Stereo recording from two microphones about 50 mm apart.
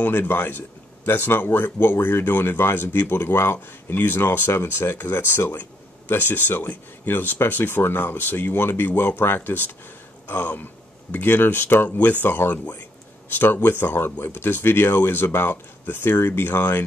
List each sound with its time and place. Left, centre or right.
0.0 s speech: left
4.5 s speech: left